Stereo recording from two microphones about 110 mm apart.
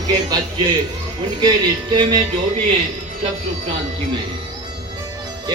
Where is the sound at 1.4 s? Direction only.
40° right (ahead or behind).